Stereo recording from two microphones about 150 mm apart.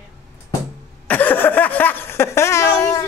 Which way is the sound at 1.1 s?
10° left (ahead or behind).